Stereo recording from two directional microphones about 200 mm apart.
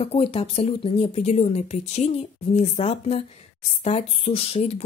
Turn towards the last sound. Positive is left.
turn(degrees=30)  # may be behind; listen again after turning